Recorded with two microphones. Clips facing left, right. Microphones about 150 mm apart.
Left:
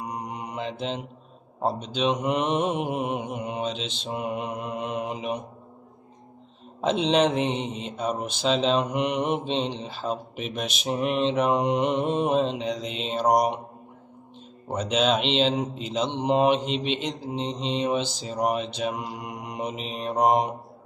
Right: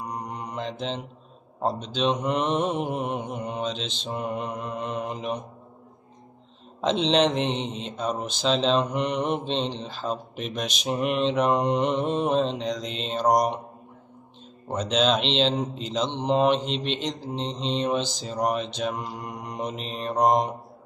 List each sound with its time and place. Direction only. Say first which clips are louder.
0.0 s mantra: even; 10° left (ahead or behind)
1.6 s speech: even; 5° left (ahead or behind)
6.8 s speech: even; 5° left (ahead or behind)
14.7 s speech: even; 10° left (ahead or behind)